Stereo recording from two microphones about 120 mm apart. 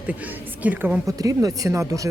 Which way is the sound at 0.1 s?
15° right (ahead or behind).